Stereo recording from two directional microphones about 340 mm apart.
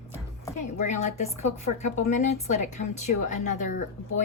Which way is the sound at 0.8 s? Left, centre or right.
Left.